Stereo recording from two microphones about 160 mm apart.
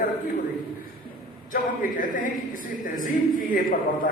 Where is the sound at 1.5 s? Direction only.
55° left (ahead or behind).